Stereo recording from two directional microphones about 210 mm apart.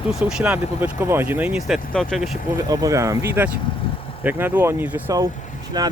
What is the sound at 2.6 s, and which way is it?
Speech, 15° right (ahead or behind).